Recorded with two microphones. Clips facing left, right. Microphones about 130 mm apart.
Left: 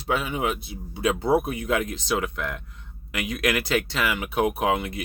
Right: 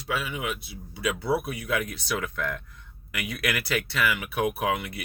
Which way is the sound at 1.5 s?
25° left (ahead or behind).